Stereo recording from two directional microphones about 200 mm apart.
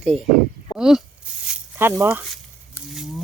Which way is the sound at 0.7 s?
Centre (ahead or behind).